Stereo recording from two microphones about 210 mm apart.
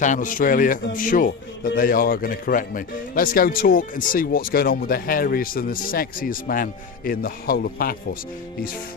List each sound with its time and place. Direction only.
0.0 s speech: 35° left (ahead or behind)